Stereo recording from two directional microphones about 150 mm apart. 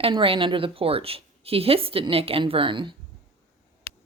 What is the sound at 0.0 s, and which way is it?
A woman's voice, 35° right (ahead or behind).